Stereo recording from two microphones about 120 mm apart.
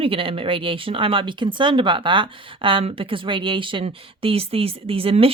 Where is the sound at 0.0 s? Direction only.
50° right (ahead or behind).